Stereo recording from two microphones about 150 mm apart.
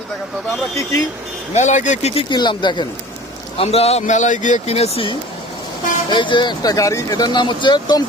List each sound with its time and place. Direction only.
1.5 s a man's voice: 55° left (ahead or behind)
2.3 s speech: 30° left (ahead or behind)
3.6 s a man's voice: 40° left (ahead or behind)